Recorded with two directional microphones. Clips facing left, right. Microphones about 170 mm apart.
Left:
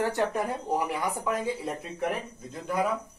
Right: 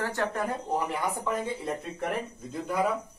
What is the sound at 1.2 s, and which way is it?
Speech, centre (ahead or behind).